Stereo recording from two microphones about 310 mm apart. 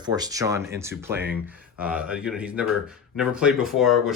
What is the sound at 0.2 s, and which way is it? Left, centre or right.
Speech, centre.